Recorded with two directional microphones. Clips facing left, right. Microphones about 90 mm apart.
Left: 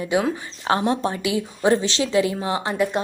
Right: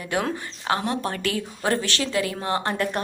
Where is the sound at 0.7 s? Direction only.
20° left (ahead or behind).